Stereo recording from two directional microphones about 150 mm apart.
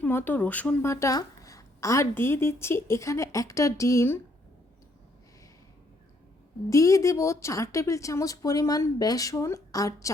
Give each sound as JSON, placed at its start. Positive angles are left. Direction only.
{"t": 0.0, "sound": "a woman's voice", "side_deg": 15}
{"t": 6.7, "sound": "a woman's voice", "side_deg": 20}